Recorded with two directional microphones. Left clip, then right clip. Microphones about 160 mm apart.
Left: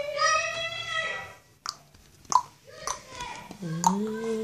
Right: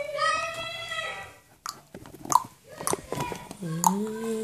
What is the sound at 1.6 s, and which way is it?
Chewing, 5° right (ahead or behind).